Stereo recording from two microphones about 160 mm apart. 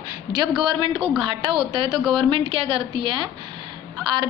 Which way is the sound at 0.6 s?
30° right (ahead or behind).